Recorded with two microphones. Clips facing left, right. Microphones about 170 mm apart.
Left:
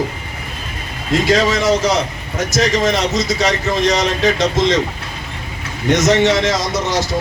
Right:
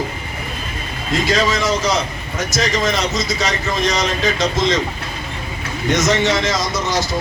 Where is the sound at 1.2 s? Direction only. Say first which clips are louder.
Left 3 dB; 70° left (ahead or behind).